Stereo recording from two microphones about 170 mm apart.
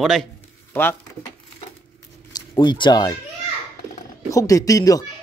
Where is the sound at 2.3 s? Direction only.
25° left (ahead or behind).